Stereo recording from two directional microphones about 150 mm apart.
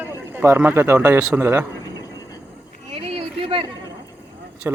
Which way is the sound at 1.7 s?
25° left (ahead or behind).